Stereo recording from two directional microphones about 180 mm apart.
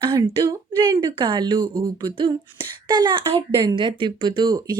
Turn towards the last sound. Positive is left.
turn(degrees=-25)  # may be behind; listen again after turning